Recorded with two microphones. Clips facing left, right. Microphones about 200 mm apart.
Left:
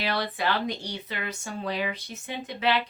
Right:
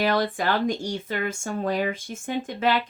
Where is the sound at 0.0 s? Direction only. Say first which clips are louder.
Right 5 dB; 50° right (ahead or behind).